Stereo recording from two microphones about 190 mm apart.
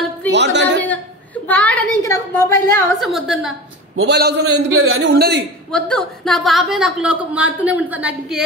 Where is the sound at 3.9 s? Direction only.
65° right (ahead or behind).